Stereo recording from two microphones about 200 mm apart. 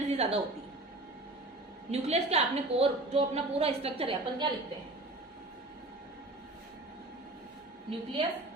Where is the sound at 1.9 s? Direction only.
30° right (ahead or behind).